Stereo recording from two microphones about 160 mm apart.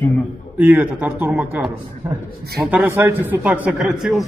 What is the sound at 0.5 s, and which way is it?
A man's voice, 10° right (ahead or behind).